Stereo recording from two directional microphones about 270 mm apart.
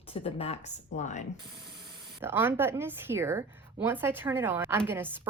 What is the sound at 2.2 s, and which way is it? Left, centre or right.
A woman's voice, centre.